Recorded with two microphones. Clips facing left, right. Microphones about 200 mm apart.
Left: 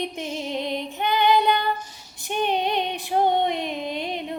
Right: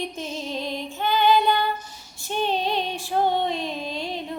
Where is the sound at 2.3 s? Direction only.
15° left (ahead or behind).